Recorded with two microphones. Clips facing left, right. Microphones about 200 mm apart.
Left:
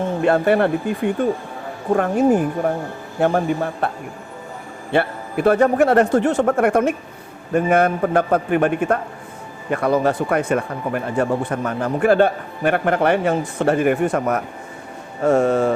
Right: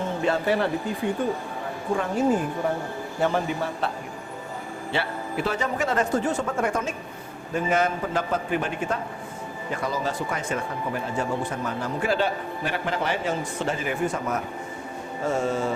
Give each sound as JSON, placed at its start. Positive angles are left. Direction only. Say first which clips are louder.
{"t": 0.2, "sound": "a man's voice", "louder": "left 8 dB", "side_deg": 60}